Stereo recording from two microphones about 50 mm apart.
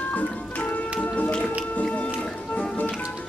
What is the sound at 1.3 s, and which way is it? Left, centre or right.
Music, left.